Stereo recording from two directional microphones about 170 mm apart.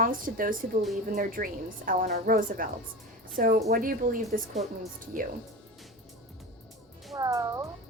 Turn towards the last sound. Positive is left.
turn(degrees=-20)  # may be behind; listen again after turning